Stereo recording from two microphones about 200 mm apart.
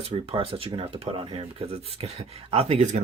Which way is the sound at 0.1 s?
25° right (ahead or behind).